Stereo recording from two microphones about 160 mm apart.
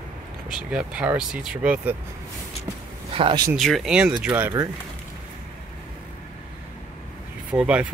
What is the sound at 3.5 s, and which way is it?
Speech, centre (ahead or behind).